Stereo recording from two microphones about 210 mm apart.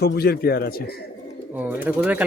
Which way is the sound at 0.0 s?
50° left (ahead or behind).